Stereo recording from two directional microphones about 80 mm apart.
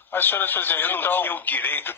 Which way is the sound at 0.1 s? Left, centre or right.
Left.